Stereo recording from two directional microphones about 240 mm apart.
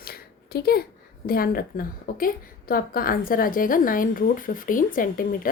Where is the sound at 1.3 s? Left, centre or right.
Left.